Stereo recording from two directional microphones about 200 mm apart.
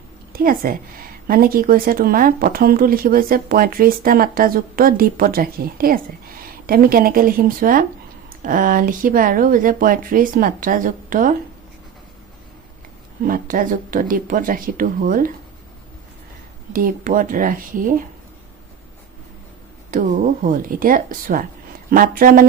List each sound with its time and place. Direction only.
0.3 s speech: 45° right (ahead or behind)
13.2 s speech: 45° right (ahead or behind)
16.7 s speech: 45° right (ahead or behind)
19.9 s speech: 40° right (ahead or behind)